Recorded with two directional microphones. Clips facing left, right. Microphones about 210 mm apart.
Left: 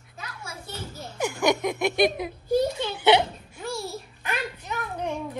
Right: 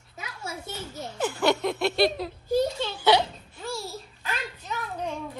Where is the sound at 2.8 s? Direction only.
20° left (ahead or behind).